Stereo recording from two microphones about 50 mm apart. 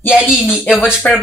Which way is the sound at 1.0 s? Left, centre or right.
Left.